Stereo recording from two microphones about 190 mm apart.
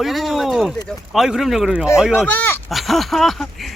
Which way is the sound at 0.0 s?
Centre (ahead or behind).